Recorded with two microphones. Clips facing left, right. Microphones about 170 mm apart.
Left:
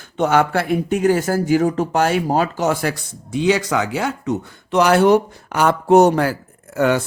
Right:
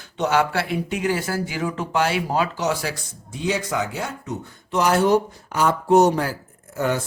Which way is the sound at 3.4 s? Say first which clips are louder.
Left 6 dB; 90° left.